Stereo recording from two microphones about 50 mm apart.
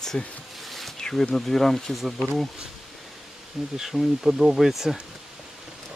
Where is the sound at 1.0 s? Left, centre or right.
Centre.